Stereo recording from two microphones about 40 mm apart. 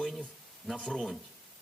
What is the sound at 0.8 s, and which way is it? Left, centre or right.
Speech, centre.